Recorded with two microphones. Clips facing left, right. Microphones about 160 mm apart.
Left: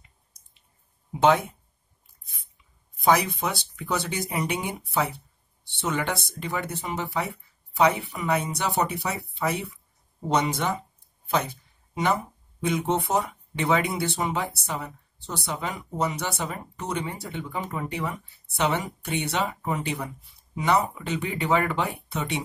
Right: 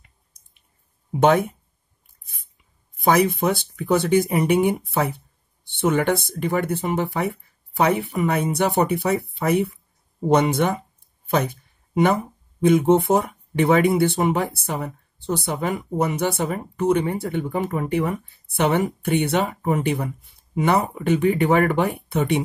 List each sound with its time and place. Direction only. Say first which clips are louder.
1.2 s speech: right 3 dB; 55° right (ahead or behind)
3.0 s speech: right 4 dB; 55° right (ahead or behind)